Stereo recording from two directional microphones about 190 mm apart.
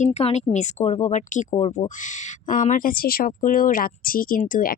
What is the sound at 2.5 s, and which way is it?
Speech, 45° left (ahead or behind).